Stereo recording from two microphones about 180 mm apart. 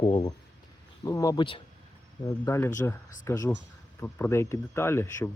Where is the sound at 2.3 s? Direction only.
15° left (ahead or behind).